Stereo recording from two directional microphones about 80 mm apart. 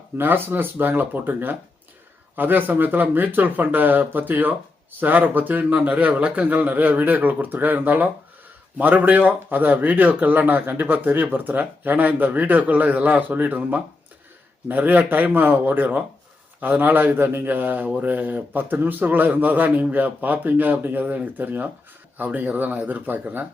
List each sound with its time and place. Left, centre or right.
0.2 s a man's voice: right